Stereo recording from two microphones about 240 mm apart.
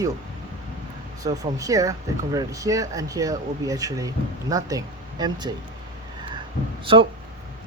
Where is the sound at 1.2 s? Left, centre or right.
Centre.